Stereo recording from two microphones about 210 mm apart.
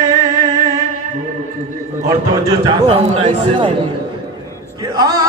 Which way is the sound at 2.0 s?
15° right (ahead or behind).